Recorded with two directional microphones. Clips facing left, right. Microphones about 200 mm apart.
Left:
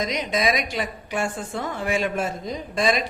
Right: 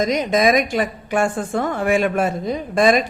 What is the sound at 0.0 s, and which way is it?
A woman's voice, 45° right (ahead or behind).